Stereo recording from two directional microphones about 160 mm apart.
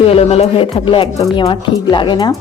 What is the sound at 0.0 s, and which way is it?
Speech, 40° left (ahead or behind).